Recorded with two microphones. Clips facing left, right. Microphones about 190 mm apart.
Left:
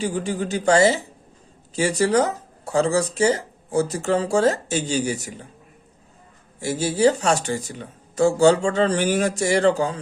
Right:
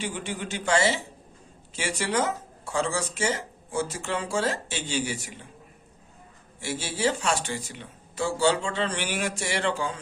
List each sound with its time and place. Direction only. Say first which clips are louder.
0.0 s speech: left 8 dB; 40° left (ahead or behind)
6.6 s speech: left 9 dB; 40° left (ahead or behind)